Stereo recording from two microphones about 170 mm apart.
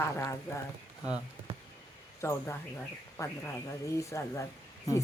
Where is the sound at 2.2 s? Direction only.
15° left (ahead or behind).